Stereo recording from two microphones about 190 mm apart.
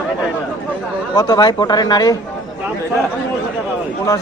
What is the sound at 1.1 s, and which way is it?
Speech, 20° left (ahead or behind).